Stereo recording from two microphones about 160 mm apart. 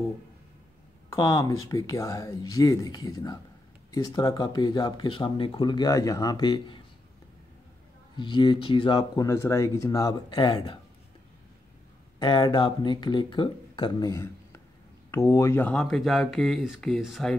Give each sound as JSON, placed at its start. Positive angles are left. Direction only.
{"t": 1.1, "sound": "speech", "side_deg": 20}
{"t": 8.2, "sound": "speech", "side_deg": 30}
{"t": 12.2, "sound": "speech", "side_deg": 30}